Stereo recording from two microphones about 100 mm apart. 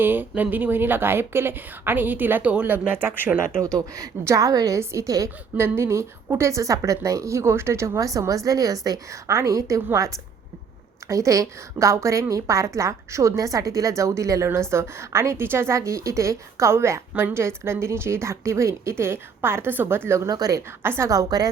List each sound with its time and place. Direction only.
0.0 s a woman's voice: 20° right (ahead or behind)
3.6 s a woman's voice: 35° right (ahead or behind)
11.1 s a woman's voice: 30° right (ahead or behind)
20.3 s a woman's voice: 40° right (ahead or behind)
20.8 s a woman's voice: 25° right (ahead or behind)
21.1 s a woman's voice: 40° right (ahead or behind)